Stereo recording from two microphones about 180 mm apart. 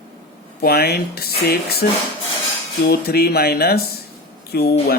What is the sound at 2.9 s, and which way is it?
A man's voice, 60° left (ahead or behind).